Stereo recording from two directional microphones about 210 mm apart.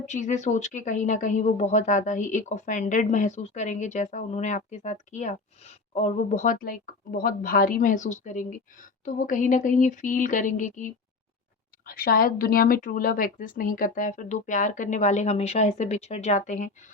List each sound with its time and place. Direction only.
0.0 s speech: 35° left (ahead or behind)